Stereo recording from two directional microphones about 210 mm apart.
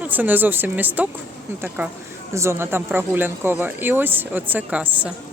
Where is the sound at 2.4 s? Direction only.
10° right (ahead or behind).